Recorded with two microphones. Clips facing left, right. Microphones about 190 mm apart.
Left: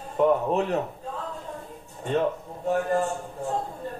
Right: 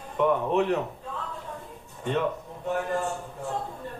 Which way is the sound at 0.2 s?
45° left (ahead or behind).